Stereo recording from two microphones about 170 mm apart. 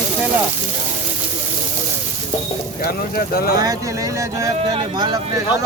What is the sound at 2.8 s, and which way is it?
Speech, 60° left (ahead or behind).